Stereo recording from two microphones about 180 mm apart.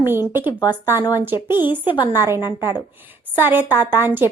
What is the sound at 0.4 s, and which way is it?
Speech, 20° left (ahead or behind).